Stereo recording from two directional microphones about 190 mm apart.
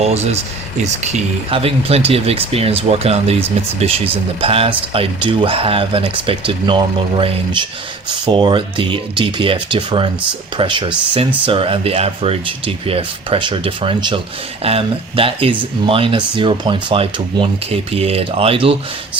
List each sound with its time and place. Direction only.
0.0 s speech: 35° right (ahead or behind)